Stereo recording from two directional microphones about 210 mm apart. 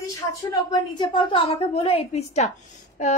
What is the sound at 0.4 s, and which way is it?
A woman's voice, 15° left (ahead or behind).